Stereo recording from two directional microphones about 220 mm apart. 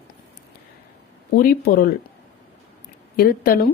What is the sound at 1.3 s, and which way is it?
Speech, 40° left (ahead or behind).